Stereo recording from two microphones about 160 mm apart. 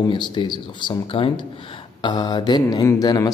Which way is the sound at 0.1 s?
30° left (ahead or behind).